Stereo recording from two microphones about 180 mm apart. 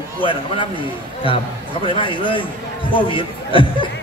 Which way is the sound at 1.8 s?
25° left (ahead or behind).